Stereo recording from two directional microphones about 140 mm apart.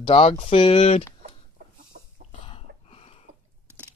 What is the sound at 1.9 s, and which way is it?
Chicken, 75° right (ahead or behind).